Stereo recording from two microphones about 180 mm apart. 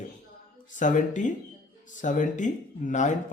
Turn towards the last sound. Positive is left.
turn(degrees=45)  # may be behind; listen again after turning